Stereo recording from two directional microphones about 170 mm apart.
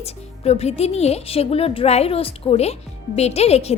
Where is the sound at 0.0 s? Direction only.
35° left (ahead or behind).